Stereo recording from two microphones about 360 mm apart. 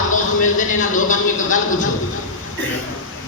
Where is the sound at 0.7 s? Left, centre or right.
Left.